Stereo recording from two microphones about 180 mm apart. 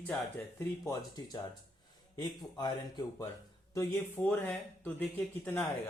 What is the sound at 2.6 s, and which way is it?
Speech, 25° left (ahead or behind).